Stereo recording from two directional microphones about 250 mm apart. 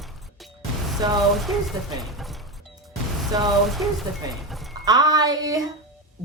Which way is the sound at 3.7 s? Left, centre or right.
Centre.